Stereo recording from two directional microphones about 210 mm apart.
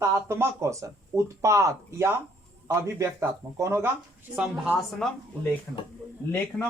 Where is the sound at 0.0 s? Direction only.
15° right (ahead or behind).